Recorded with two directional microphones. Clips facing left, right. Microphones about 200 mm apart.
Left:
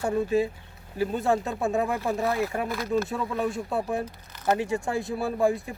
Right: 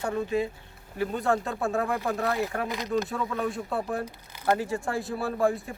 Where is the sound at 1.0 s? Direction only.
20° left (ahead or behind).